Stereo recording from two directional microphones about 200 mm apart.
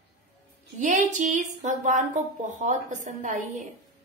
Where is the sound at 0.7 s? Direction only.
40° right (ahead or behind).